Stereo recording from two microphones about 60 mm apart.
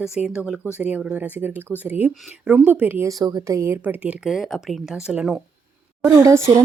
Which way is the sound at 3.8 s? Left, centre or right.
Right.